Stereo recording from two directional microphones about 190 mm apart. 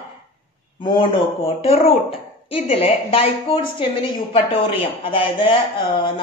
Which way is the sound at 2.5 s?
30° left (ahead or behind).